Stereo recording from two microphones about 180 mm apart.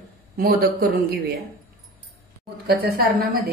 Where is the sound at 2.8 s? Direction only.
55° right (ahead or behind).